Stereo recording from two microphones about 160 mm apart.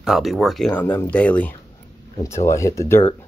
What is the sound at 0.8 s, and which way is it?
Speech, 10° left (ahead or behind).